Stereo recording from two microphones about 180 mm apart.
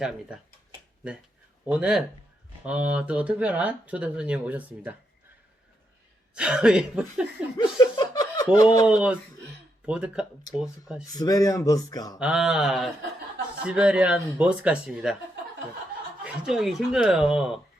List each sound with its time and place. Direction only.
0.0 s speech: 5° right (ahead or behind)
1.6 s speech: 5° right (ahead or behind)
6.3 s speech: 5° right (ahead or behind)
7.9 s a sound: 20° left (ahead or behind)
8.5 s speech: 20° left (ahead or behind)
8.9 s speech: 5° right (ahead or behind)
11.1 s speech: 20° left (ahead or behind)
12.2 s speech: 5° right (ahead or behind)
16.2 s speech: 5° right (ahead or behind)